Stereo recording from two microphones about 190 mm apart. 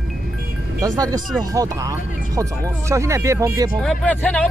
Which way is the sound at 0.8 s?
20° right (ahead or behind).